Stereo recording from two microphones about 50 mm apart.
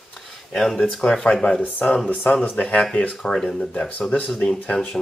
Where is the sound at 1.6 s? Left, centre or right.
Left.